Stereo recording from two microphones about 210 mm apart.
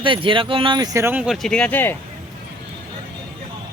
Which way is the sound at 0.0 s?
25° right (ahead or behind).